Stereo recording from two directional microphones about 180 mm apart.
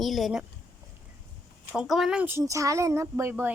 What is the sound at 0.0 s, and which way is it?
Speech, centre (ahead or behind).